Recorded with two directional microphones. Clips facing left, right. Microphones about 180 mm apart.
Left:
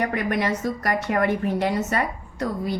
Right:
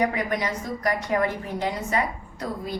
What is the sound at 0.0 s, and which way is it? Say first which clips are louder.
Speech: left 1 dB; 65° left (ahead or behind).